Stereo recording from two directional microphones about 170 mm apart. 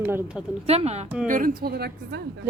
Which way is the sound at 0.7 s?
40° right (ahead or behind).